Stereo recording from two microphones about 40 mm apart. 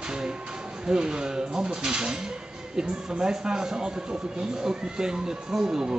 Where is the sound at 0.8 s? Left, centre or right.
Centre.